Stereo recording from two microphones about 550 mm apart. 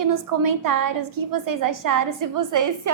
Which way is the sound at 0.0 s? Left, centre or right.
Right.